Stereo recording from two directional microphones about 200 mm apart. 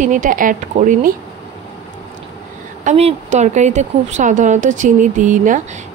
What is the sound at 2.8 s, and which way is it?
Speech, 35° right (ahead or behind).